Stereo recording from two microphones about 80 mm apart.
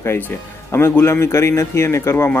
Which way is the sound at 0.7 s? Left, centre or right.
Left.